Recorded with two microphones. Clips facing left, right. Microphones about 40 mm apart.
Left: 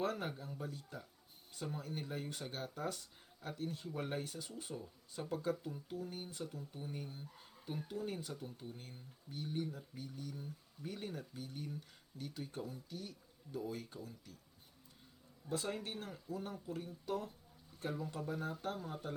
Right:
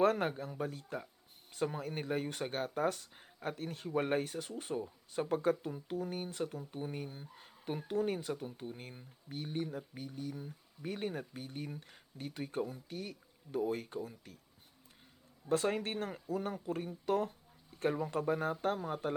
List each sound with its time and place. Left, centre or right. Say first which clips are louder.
0.0 s speech: right 9 dB; right
7.3 s a sound: right 8 dB; right
7.9 s speech: right 11 dB; right
15.4 s speech: right 8 dB; right